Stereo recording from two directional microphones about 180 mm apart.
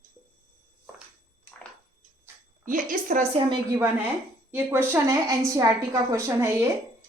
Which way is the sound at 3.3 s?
30° right (ahead or behind).